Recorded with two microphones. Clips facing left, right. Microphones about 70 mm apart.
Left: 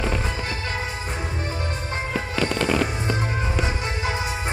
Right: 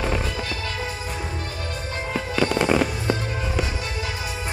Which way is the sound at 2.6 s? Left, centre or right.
Centre.